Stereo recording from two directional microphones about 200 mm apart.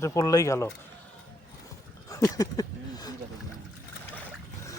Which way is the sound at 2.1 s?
15° left (ahead or behind).